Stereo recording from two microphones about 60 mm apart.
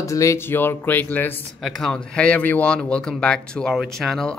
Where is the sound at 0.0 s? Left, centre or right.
Left.